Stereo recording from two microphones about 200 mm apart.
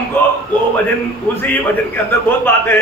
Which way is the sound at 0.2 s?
10° left (ahead or behind).